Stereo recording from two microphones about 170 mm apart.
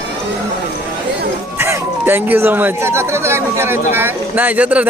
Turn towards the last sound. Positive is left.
turn(degrees=-10)  # may be behind; listen again after turning